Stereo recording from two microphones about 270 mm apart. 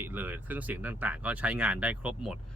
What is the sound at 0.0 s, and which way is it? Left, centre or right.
Speech, centre.